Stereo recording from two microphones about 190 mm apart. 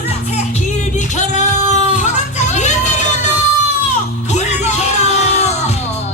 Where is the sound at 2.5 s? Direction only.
40° left (ahead or behind).